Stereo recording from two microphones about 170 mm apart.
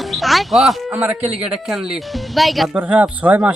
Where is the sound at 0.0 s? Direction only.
Centre (ahead or behind).